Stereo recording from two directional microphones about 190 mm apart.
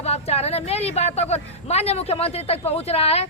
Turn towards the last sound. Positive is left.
turn(degrees=30)  # may be behind; listen again after turning